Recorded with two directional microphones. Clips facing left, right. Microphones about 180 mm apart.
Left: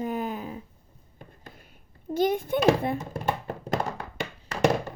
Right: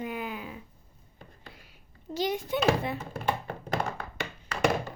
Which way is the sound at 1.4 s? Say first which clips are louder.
Left 2 dB; 50° left (ahead or behind).